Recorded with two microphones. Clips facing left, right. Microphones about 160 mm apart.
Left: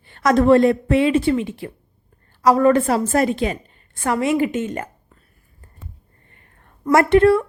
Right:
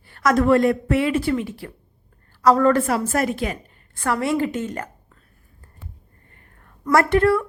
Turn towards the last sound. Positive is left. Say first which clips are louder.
# left 4 dB
turn(degrees=25)  # may be behind; listen again after turning